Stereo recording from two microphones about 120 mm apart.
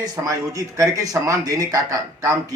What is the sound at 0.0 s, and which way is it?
A man's voice, 30° right (ahead or behind).